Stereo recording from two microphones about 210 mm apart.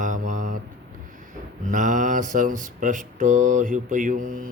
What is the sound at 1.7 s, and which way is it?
Mantra, 35° right (ahead or behind).